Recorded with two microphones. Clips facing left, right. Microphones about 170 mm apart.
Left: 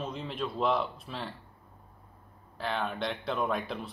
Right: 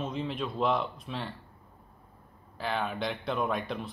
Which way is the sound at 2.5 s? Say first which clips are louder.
Right 1 dB; centre (ahead or behind).